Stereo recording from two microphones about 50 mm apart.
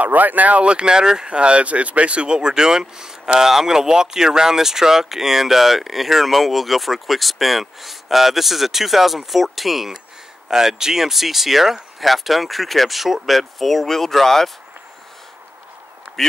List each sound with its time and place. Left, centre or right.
0.0 s speech: right; by 14.5 s centre